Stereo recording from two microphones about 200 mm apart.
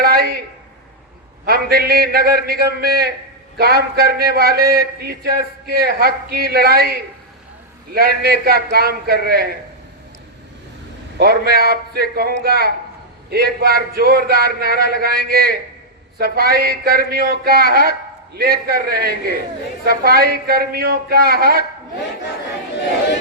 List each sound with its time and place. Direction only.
0.0 s a sound: 50° right (ahead or behind)
1.5 s a man's voice: 50° right (ahead or behind)
11.2 s a man's voice: 50° right (ahead or behind)